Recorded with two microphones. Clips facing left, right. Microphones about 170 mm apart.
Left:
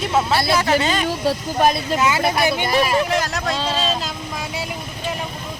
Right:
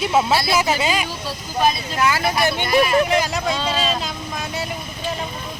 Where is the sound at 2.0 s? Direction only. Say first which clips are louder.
Right 3 dB; 20° left (ahead or behind).